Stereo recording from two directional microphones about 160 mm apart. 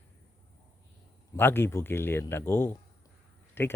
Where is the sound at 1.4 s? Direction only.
15° left (ahead or behind).